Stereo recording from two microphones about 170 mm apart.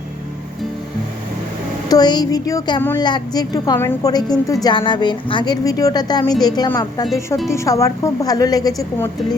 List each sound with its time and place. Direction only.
1.9 s a woman's voice: 25° left (ahead or behind)